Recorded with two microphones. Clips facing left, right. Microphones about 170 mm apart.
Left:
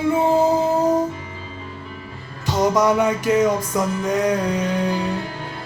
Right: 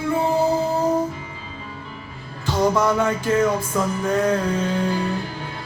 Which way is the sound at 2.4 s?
20° left (ahead or behind).